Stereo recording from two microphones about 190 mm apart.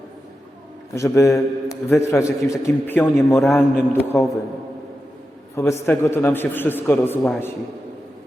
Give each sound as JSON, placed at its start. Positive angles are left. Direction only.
{"t": 0.9, "sound": "a man's voice", "side_deg": 15}
{"t": 5.5, "sound": "a man's voice", "side_deg": 15}